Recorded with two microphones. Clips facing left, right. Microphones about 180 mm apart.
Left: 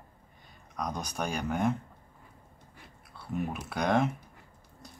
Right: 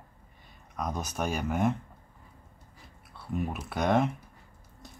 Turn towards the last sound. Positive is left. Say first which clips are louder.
# right 1 dB
turn(degrees=0)  # may be behind; listen again after turning